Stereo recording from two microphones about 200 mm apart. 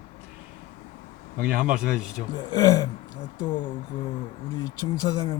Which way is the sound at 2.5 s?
20° left (ahead or behind).